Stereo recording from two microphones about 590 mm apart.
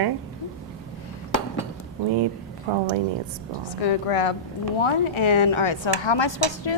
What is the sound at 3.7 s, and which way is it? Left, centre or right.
A woman's voice, left.